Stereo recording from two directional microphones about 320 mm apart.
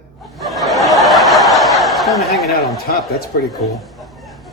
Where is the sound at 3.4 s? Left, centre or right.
Centre.